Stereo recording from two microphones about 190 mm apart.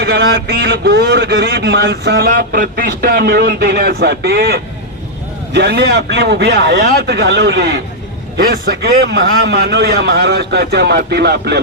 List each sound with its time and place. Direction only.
0.0 s a man's voice: 60° right (ahead or behind)